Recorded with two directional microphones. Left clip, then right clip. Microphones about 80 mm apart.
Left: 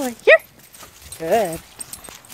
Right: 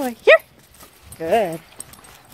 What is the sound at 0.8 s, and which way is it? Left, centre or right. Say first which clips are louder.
Dog: even; centre.